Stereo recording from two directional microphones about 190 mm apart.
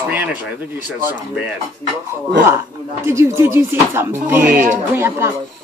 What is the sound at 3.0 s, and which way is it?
Speech, 15° right (ahead or behind).